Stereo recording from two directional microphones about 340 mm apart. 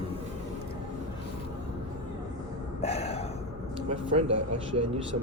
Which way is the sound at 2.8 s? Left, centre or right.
Centre.